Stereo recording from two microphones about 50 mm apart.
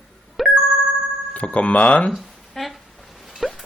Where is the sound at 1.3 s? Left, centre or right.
Left.